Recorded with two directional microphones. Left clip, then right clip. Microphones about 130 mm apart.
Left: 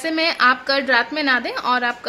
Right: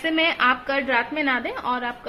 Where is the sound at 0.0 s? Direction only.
15° left (ahead or behind).